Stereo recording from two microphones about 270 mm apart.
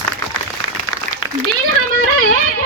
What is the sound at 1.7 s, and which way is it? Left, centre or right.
Music, right.